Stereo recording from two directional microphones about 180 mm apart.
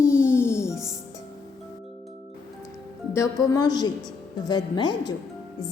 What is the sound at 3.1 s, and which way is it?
A woman's voice, 15° left (ahead or behind).